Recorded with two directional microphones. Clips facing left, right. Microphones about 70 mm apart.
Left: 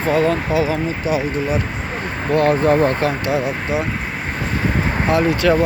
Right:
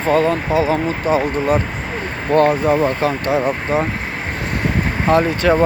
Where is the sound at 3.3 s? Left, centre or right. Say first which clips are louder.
Right 2 dB; right.